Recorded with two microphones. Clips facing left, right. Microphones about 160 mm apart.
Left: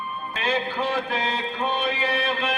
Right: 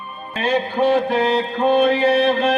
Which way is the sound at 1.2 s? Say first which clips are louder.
Right 9 dB; 60° right (ahead or behind).